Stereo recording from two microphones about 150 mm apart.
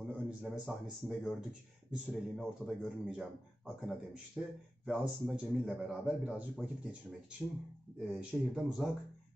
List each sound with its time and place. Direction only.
0.0 s a man's voice: 10° right (ahead or behind)
8.0 s a man's voice: 5° right (ahead or behind)